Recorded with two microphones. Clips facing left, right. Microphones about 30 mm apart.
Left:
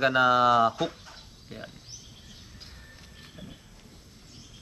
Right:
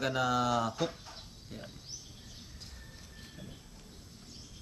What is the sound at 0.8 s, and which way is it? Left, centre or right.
Insect, left.